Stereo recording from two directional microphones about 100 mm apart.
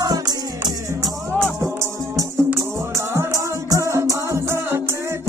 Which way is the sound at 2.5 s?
25° right (ahead or behind).